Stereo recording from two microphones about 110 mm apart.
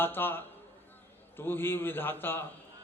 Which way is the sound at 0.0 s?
20° left (ahead or behind).